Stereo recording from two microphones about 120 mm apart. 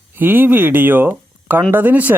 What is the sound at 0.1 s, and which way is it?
Speech, 15° right (ahead or behind).